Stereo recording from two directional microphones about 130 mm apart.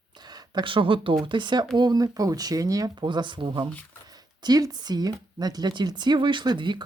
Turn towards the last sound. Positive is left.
turn(degrees=-35)  # may be behind; listen again after turning